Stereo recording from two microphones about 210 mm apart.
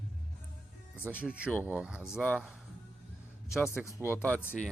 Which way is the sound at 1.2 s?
5° right (ahead or behind).